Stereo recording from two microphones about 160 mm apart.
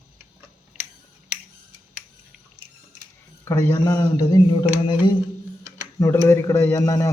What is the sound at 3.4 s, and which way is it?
A man's voice, 20° left (ahead or behind).